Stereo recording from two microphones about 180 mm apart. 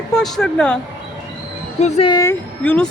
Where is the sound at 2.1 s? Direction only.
20° left (ahead or behind).